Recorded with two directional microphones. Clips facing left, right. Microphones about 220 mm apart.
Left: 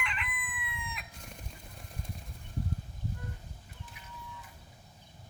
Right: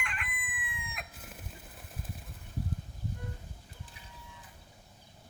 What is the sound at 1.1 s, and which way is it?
Chicken, 5° right (ahead or behind).